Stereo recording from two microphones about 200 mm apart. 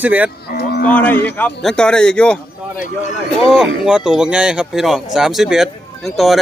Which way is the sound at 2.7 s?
40° left (ahead or behind).